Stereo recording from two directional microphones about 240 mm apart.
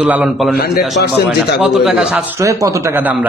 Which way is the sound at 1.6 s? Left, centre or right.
Centre.